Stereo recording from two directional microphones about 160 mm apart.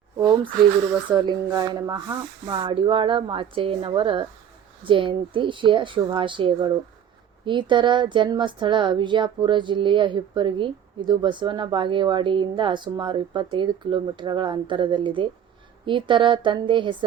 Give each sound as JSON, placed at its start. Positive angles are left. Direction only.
{"t": 1.1, "sound": "speech", "side_deg": -25}